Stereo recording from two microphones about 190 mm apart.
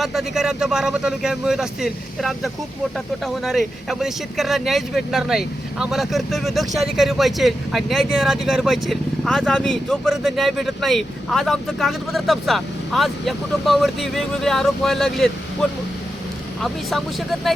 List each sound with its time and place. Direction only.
0.0 s speech: centre (ahead or behind)
16.6 s speech: centre (ahead or behind)